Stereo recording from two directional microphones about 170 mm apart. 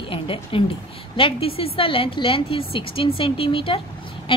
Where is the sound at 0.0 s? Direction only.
30° left (ahead or behind).